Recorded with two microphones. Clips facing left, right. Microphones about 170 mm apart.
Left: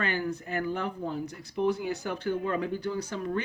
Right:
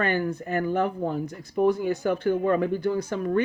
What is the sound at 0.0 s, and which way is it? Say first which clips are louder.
Speech: right 5 dB; 50° right (ahead or behind).